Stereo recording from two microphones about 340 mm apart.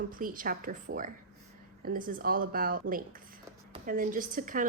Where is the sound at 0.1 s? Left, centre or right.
Right.